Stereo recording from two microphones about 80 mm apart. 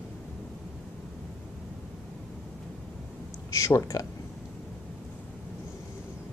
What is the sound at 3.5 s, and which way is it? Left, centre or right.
Speech, left.